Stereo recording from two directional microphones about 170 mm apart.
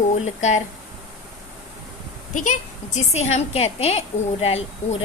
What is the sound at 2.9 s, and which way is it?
A woman's voice, 40° left (ahead or behind).